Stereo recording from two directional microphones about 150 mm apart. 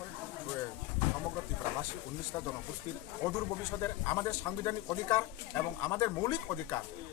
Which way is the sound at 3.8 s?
20° left (ahead or behind).